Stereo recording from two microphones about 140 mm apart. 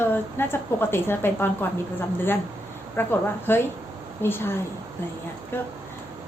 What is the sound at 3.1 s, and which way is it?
A woman's voice, 15° left (ahead or behind).